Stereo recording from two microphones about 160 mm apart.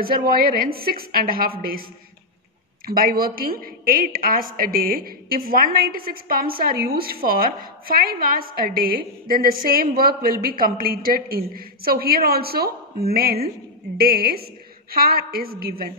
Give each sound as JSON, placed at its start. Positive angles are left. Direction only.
{"t": 0.0, "sound": "a woman's voice", "side_deg": -65}
{"t": 2.9, "sound": "a woman's voice", "side_deg": -65}